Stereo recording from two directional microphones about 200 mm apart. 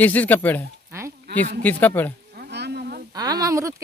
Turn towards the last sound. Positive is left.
turn(degrees=-15)  # may be behind; listen again after turning